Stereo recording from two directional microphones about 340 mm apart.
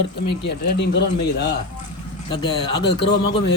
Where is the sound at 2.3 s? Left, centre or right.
Centre.